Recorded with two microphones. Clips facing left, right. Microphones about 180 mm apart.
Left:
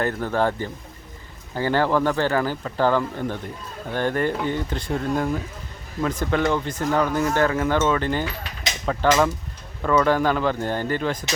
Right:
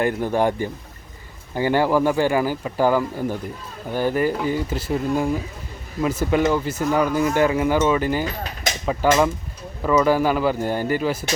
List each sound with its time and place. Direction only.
0.0 s speech: 15° right (ahead or behind)